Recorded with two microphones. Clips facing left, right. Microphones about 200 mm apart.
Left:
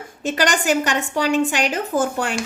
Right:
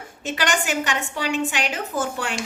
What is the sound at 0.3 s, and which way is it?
A woman's voice, 40° left (ahead or behind).